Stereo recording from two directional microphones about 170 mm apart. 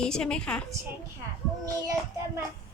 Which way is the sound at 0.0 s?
5° left (ahead or behind).